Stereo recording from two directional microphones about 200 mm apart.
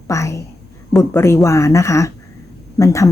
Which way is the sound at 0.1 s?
15° left (ahead or behind).